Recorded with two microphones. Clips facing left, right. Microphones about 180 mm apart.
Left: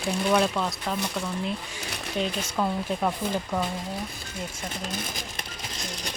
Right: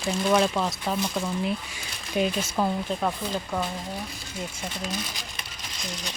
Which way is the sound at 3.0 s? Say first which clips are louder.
Left 1 dB; 5° left (ahead or behind).